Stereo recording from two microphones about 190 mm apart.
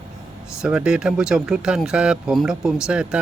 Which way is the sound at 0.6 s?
5° right (ahead or behind).